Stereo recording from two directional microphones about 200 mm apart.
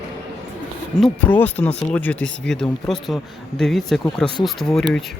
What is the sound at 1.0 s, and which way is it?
Speech, 5° left (ahead or behind).